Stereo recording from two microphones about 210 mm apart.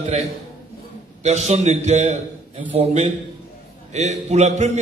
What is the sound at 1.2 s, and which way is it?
A man's voice, 35° right (ahead or behind).